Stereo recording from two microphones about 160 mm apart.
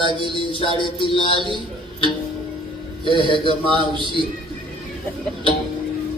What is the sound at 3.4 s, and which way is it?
Speech, 30° right (ahead or behind).